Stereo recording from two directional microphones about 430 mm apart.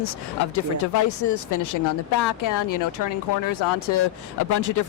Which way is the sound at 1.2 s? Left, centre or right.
Left.